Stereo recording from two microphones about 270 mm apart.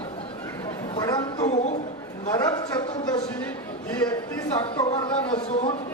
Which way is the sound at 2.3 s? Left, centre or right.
Centre.